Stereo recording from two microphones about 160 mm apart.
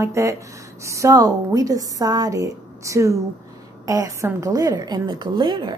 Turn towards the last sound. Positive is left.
turn(degrees=-30)  # may be behind; listen again after turning